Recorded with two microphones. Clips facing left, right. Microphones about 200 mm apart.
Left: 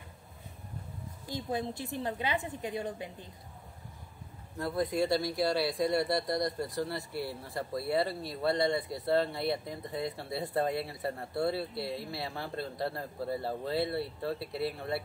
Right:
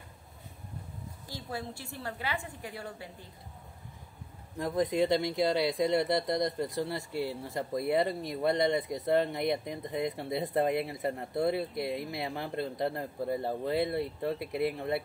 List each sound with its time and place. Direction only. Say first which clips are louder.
1.5 s a woman's voice: left 5 dB; 20° left (ahead or behind)
4.6 s speech: right 2 dB; 15° right (ahead or behind)